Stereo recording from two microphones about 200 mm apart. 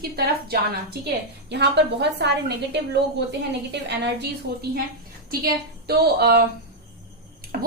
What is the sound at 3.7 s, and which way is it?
Speech, 60° right (ahead or behind).